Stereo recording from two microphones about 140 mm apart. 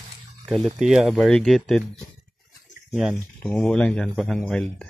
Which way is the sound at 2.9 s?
5° right (ahead or behind).